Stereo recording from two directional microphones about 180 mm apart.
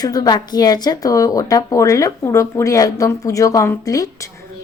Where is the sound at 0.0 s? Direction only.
20° left (ahead or behind).